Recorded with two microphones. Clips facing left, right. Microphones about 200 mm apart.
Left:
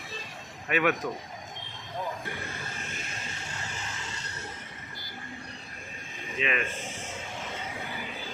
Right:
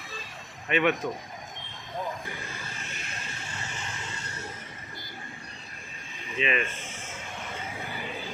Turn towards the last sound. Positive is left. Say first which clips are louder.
# right 2 dB
turn(degrees=0)  # may be behind; listen again after turning